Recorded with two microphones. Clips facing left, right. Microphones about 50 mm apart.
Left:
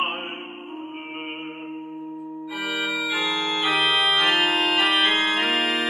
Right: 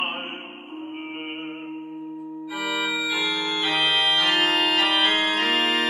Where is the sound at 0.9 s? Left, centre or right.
Centre.